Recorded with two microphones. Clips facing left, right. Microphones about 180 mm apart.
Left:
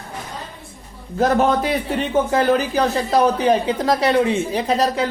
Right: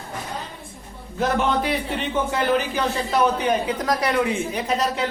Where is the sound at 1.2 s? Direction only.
40° left (ahead or behind).